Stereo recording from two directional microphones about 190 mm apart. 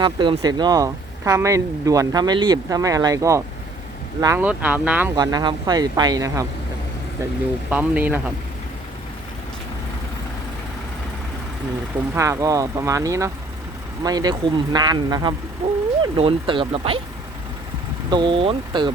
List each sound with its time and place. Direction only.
0.0 s speech: 25° right (ahead or behind); by 5.1 s 10° right (ahead or behind)
5.1 s speech: 20° right (ahead or behind)
7.7 s speech: 10° right (ahead or behind)
12.1 s speech: 15° right (ahead or behind)
18.1 s speech: 25° right (ahead or behind)